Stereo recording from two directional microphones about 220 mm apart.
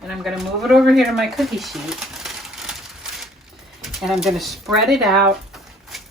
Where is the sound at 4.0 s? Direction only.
Centre (ahead or behind).